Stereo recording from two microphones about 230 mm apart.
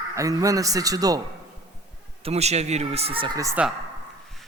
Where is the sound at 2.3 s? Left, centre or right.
Right.